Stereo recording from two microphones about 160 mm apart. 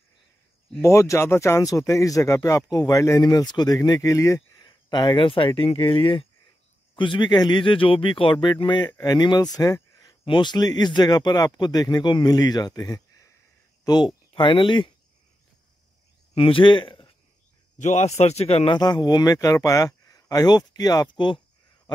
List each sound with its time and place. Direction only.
0.7 s a man's voice: 15° left (ahead or behind); by 14.9 s 30° left (ahead or behind)
16.3 s a man's voice: 35° left (ahead or behind)
17.7 s a man's voice: 45° left (ahead or behind)
18.8 s speech: 25° left (ahead or behind)